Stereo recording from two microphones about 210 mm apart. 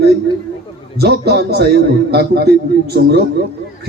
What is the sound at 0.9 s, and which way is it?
A man's voice, 50° right (ahead or behind).